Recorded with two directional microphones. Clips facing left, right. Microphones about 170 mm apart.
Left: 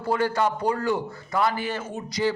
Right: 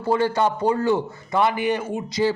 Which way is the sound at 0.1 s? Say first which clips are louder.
Right 3 dB; 25° right (ahead or behind).